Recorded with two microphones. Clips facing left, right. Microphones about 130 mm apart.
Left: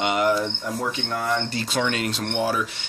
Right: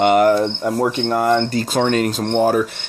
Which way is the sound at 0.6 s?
60° right (ahead or behind).